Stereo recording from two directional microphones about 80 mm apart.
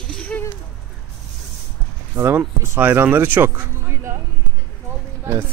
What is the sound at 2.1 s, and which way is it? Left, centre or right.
Speech, right.